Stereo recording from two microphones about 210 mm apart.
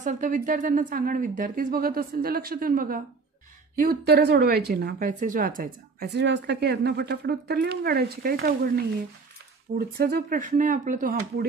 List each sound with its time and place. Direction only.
0.0 s a woman's voice: 35° right (ahead or behind)